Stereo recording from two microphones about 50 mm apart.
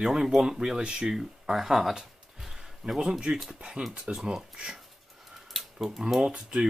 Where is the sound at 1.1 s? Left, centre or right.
Centre.